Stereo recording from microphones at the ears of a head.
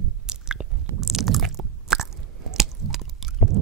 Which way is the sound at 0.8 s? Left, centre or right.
Right.